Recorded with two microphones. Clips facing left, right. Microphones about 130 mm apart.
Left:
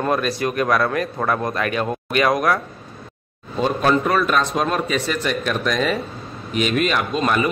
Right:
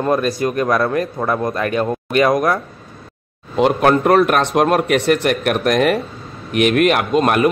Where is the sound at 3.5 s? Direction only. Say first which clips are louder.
Right 5 dB; 65° right (ahead or behind).